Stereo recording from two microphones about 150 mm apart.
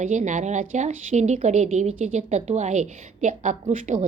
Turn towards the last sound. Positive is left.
turn(degrees=-50)  # may be behind; listen again after turning